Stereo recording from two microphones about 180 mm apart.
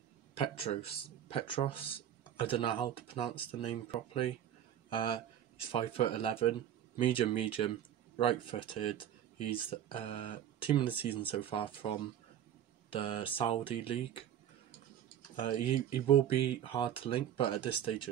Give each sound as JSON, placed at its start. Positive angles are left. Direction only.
{"t": 0.6, "sound": "speech", "side_deg": 35}
{"t": 15.3, "sound": "speech", "side_deg": 30}